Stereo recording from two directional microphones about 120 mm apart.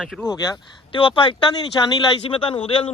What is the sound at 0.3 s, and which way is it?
Speech, 30° left (ahead or behind).